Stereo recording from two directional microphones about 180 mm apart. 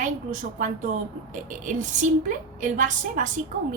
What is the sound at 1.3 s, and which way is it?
A woman's voice, 45° right (ahead or behind).